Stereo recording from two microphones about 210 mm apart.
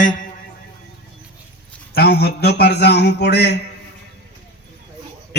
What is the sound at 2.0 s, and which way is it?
A man's voice, 50° left (ahead or behind).